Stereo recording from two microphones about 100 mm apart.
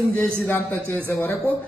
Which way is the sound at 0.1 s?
15° left (ahead or behind).